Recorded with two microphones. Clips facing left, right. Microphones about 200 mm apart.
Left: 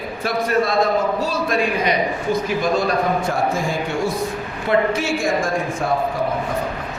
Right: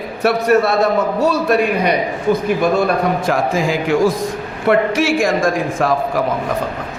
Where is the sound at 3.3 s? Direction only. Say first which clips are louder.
Right 4 dB; 90° right.